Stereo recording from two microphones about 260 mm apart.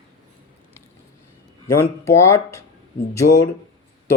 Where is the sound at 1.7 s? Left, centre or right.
Centre.